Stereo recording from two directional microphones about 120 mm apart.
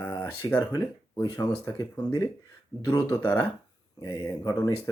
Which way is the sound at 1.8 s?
20° left (ahead or behind).